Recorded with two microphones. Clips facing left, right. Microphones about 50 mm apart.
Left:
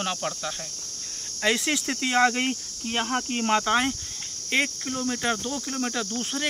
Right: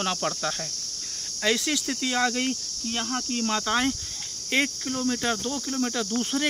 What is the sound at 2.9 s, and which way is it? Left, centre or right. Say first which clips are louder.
Speech: left 3 dB; left.